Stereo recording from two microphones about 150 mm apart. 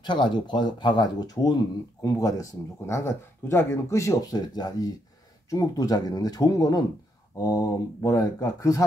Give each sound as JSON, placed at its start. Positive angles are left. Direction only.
{"t": 0.0, "sound": "speech", "side_deg": 30}